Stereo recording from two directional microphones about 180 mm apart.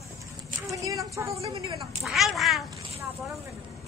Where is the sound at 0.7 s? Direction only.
20° right (ahead or behind).